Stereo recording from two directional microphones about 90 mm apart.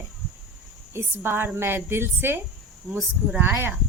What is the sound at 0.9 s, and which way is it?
A child's voice, 25° right (ahead or behind).